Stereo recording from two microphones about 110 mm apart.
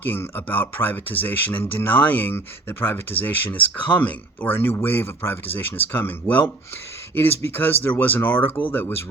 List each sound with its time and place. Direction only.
0.0 s speech: 15° left (ahead or behind)